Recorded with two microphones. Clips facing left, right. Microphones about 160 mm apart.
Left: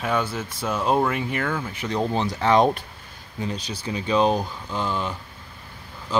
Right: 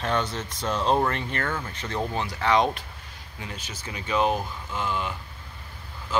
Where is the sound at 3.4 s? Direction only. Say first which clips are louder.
Left 9 dB; 35° left (ahead or behind).